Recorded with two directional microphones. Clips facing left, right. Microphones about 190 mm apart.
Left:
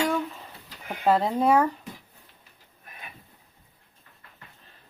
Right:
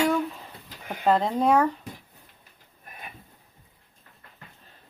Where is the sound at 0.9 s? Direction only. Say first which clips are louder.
Even; 5° left (ahead or behind).